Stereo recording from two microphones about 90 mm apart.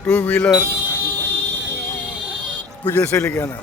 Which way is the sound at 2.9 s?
25° left (ahead or behind).